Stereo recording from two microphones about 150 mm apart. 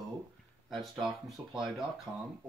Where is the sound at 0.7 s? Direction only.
Centre (ahead or behind).